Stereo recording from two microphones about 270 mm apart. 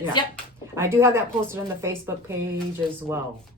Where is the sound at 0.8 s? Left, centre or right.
Centre.